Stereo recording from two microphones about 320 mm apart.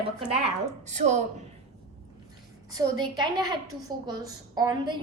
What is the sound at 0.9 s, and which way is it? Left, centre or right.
Speech, right.